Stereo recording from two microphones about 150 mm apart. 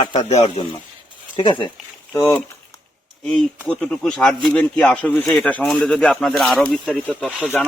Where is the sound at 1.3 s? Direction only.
35° left (ahead or behind).